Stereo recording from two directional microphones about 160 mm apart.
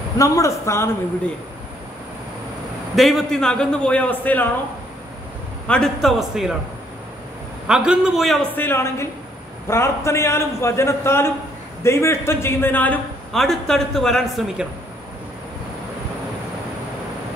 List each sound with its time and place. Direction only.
0.2 s a man's voice: 20° left (ahead or behind)
3.0 s a man's voice: centre (ahead or behind)
5.7 s a man's voice: centre (ahead or behind)
7.6 s a man's voice: 5° right (ahead or behind)
8.5 s a man's voice: 15° left (ahead or behind); by 14.7 s centre (ahead or behind)